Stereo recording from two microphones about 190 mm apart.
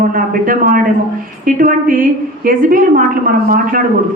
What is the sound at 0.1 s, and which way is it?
A woman's voice, 45° right (ahead or behind).